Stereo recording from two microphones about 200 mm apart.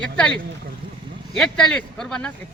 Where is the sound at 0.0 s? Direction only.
5° left (ahead or behind).